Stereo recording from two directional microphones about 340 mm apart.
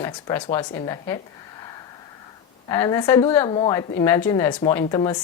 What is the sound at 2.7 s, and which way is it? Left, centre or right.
Speech, centre.